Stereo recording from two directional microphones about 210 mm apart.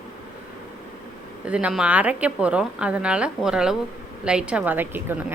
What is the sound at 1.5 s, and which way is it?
A woman's voice, 5° right (ahead or behind).